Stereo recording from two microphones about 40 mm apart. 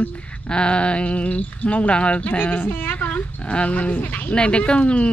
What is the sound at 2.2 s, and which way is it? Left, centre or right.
Speech, left.